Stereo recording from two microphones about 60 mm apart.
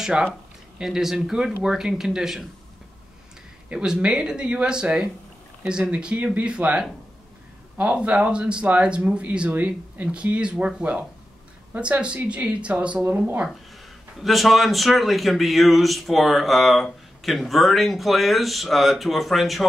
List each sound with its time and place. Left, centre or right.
0.0 s speech: centre
3.6 s speech: centre
13.0 s speech: right
14.2 s a man's voice: centre